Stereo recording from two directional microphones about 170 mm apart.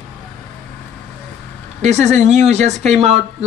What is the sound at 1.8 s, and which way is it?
Speech, 45° right (ahead or behind).